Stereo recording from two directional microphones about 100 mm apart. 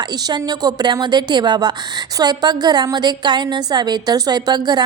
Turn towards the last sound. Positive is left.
turn(degrees=-45)  # may be behind; listen again after turning